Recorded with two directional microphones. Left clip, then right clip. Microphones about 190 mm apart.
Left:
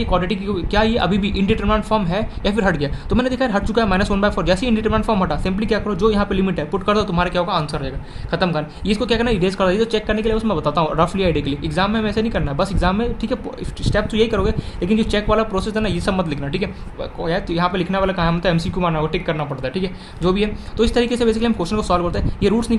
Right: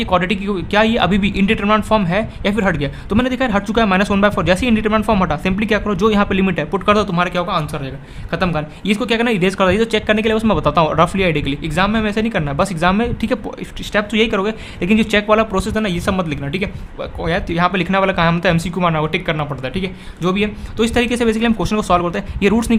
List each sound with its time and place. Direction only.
0.0 s speech: 35° right (ahead or behind)